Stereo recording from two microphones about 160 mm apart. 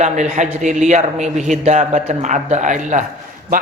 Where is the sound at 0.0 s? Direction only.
50° right (ahead or behind).